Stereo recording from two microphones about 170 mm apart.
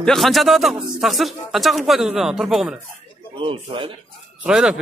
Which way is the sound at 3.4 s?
30° right (ahead or behind).